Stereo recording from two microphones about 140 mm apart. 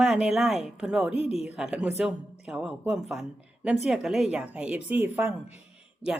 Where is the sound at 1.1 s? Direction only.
45° left (ahead or behind).